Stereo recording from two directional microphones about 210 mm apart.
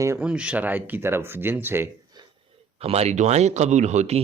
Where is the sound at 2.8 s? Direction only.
30° right (ahead or behind).